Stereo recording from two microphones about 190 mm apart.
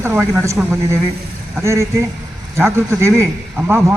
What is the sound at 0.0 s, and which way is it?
Speech, 15° right (ahead or behind).